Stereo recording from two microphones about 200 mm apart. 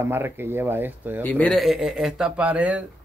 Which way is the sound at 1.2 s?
10° left (ahead or behind).